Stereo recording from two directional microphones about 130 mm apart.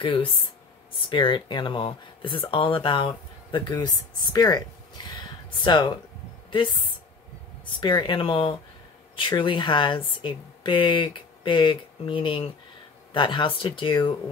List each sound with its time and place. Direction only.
0.0 s speech: 40° left (ahead or behind)
7.8 s speech: 35° left (ahead or behind)